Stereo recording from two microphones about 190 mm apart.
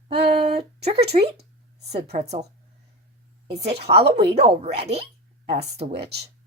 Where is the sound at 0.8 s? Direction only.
35° right (ahead or behind).